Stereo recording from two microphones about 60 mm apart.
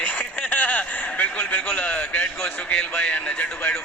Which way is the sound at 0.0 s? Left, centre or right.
Left.